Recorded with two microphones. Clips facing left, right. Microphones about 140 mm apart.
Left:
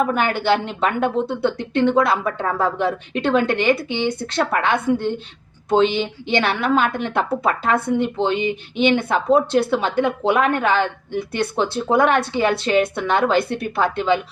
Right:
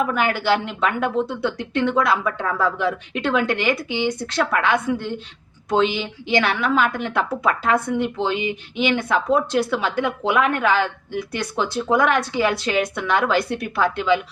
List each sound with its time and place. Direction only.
0.1 s speech: 25° left (ahead or behind)
3.8 s speech: 10° right (ahead or behind)
4.4 s speech: 25° left (ahead or behind)